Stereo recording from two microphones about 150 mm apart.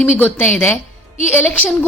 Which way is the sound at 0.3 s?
15° left (ahead or behind).